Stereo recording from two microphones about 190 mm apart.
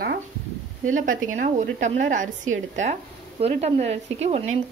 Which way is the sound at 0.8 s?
45° right (ahead or behind).